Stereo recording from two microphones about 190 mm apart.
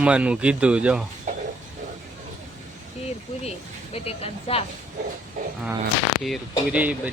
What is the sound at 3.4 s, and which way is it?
Speech, 30° left (ahead or behind).